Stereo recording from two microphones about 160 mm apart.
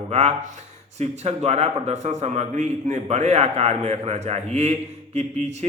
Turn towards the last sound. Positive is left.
turn(degrees=-45)  # may be behind; listen again after turning